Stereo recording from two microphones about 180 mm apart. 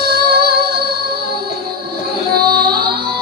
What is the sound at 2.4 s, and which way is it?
Singing, 60° right (ahead or behind).